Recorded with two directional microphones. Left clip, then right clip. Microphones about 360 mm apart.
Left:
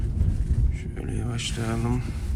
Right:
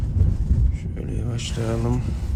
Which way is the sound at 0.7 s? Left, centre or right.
Centre.